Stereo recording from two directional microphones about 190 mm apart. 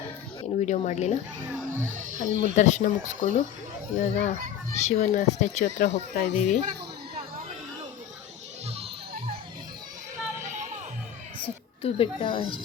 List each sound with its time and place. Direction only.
0.6 s speech: 40° left (ahead or behind)
2.1 s speech: 40° left (ahead or behind)
11.8 s speech: 30° left (ahead or behind)